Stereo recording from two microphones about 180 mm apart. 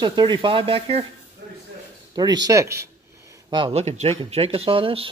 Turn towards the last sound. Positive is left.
turn(degrees=-30)  # may be behind; listen again after turning